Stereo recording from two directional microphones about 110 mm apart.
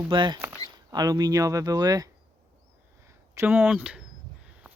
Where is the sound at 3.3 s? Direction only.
20° right (ahead or behind).